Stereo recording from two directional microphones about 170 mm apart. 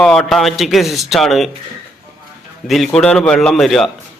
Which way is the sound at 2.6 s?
Centre (ahead or behind).